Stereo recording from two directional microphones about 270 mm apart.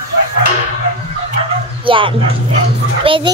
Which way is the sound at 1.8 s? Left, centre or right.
Centre.